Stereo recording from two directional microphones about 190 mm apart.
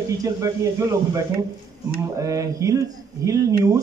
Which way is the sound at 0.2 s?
15° right (ahead or behind).